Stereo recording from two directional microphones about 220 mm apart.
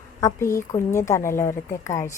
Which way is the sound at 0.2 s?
15° left (ahead or behind).